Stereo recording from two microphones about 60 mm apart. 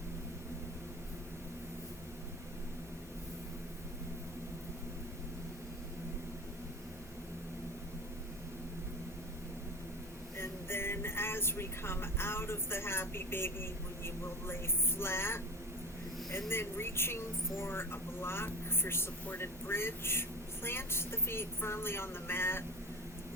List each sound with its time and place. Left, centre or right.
10.3 s speech: left
16.5 s a woman's voice: left